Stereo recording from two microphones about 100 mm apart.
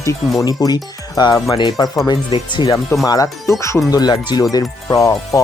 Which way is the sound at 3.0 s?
35° left (ahead or behind).